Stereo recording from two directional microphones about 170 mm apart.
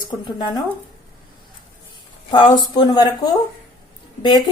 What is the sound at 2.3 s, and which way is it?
Speech, 30° left (ahead or behind).